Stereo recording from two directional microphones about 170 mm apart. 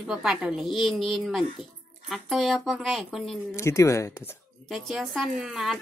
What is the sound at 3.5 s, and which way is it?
Speech, 15° left (ahead or behind).